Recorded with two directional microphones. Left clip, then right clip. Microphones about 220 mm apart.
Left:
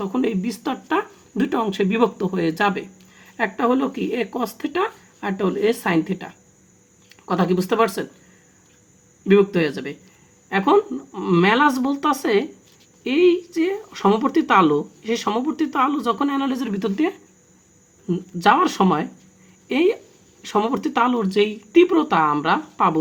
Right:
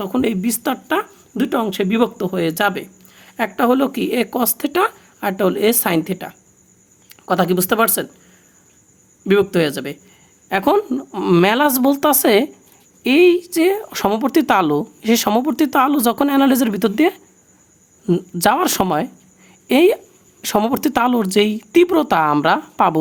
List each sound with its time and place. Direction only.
0.0 s speech: 30° right (ahead or behind)
9.2 s speech: 35° right (ahead or behind)